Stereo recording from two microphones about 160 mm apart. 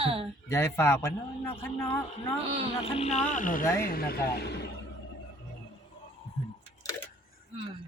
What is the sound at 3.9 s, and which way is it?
Speech, 70° left (ahead or behind).